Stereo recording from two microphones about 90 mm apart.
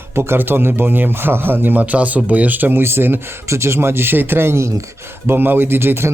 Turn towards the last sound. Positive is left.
turn(degrees=-25)  # may be behind; listen again after turning